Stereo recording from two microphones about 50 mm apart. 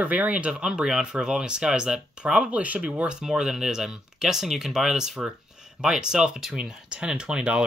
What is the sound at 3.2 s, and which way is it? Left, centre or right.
Speech, centre.